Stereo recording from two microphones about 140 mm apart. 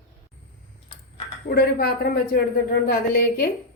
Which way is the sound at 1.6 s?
90° left.